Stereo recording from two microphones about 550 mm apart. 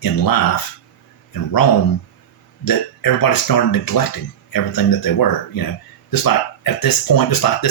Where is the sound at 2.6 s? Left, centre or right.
Left.